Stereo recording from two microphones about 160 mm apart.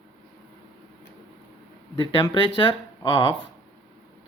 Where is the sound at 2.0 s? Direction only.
30° left (ahead or behind).